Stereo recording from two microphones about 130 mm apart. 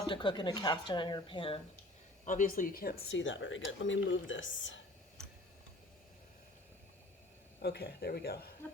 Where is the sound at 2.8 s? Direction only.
90° left.